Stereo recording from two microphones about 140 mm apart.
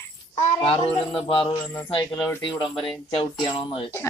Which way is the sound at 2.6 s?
40° left (ahead or behind).